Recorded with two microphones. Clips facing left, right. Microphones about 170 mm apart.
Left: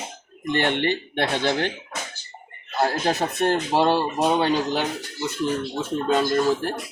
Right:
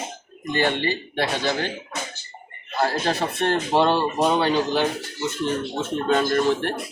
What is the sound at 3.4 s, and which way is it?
Speech, 10° left (ahead or behind).